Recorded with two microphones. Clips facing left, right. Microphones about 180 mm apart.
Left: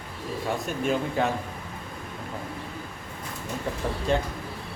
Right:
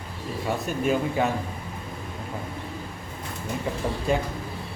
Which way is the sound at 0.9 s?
5° right (ahead or behind).